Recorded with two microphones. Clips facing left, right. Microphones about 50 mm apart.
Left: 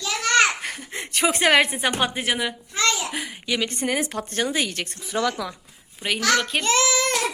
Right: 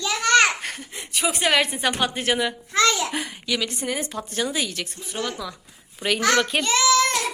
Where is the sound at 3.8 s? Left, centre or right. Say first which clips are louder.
Left 3 dB; left.